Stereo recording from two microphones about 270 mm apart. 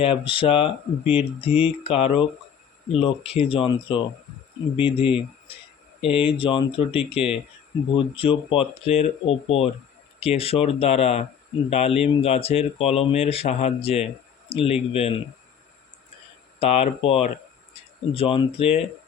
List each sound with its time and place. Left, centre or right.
0.0 s speech: centre
16.6 s speech: left